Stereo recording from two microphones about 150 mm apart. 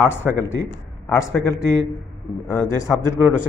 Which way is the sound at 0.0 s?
15° left (ahead or behind).